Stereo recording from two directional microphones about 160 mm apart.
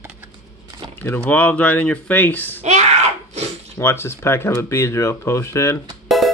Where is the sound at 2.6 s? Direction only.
45° right (ahead or behind).